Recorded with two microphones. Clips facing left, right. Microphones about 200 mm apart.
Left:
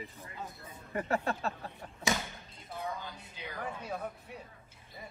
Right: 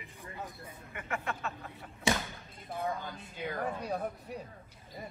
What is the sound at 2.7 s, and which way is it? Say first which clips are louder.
Speech: right 4 dB; 50° right (ahead or behind).